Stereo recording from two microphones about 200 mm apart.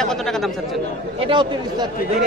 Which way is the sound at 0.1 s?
Centre (ahead or behind).